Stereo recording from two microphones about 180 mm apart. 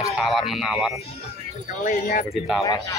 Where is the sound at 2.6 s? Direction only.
20° left (ahead or behind).